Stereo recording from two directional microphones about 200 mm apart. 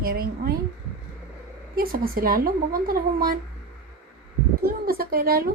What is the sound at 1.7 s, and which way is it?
Speech, 45° right (ahead or behind).